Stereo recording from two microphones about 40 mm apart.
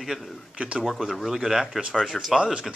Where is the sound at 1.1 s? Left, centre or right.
Centre.